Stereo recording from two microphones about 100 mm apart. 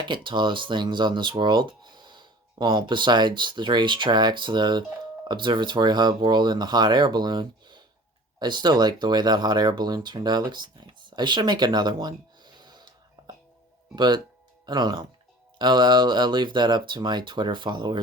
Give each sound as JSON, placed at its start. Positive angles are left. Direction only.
{"t": 0.0, "sound": "speech", "side_deg": -55}